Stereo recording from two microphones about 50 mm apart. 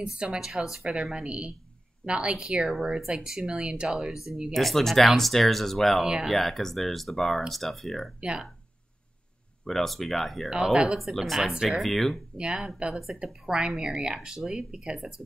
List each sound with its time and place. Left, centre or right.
0.0 s a woman's voice: centre
0.4 s a woman's voice: centre
4.1 s speech: centre
8.2 s speech: centre
9.7 s speech: centre
10.5 s speech: centre
11.0 s speech: centre
12.4 s speech: centre